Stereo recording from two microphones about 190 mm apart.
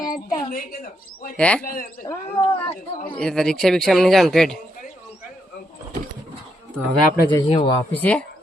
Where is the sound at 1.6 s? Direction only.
50° left (ahead or behind).